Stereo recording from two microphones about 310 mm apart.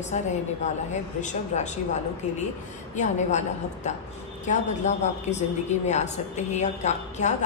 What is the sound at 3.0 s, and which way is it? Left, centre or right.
A woman's voice, left.